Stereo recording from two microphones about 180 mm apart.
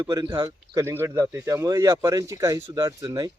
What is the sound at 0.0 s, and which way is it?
Speech, 20° right (ahead or behind).